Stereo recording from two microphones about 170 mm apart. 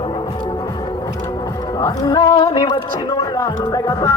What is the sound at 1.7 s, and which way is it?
Music, 25° left (ahead or behind).